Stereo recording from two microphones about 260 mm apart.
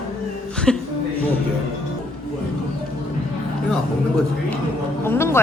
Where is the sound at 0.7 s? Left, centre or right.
Centre.